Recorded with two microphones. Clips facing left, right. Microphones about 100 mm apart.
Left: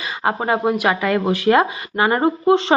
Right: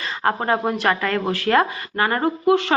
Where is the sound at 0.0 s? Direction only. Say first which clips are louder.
Left 1 dB; 10° left (ahead or behind).